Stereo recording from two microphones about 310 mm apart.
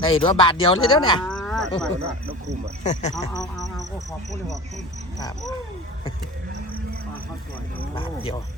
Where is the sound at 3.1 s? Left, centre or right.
Centre.